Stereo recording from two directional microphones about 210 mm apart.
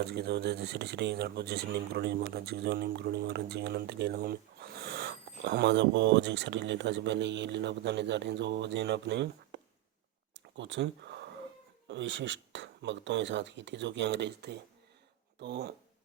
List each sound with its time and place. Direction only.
0.1 s speech: 50° right (ahead or behind)
10.3 s a sound: 60° right (ahead or behind)
11.9 s speech: 60° right (ahead or behind)